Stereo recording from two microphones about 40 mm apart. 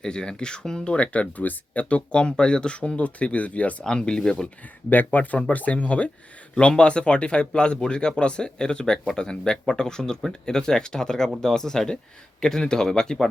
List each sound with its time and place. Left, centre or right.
0.0 s speech: centre; by 3.8 s left
3.8 s speech: centre
4.9 s speech: left; by 13.2 s centre